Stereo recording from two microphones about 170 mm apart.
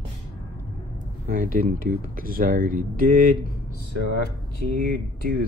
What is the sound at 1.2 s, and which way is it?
Speech, 55° right (ahead or behind).